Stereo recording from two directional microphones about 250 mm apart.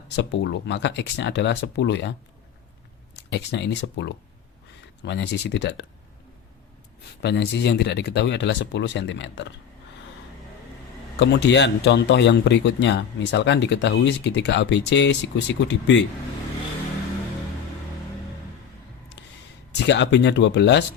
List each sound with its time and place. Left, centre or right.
0.2 s speech: left
3.2 s speech: left
7.2 s speech: left
11.2 s speech: left
19.7 s speech: left